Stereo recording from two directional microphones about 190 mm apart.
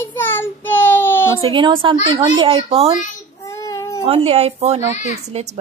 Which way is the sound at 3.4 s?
15° left (ahead or behind).